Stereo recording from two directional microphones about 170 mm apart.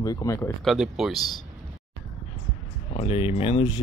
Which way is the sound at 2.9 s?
35° left (ahead or behind).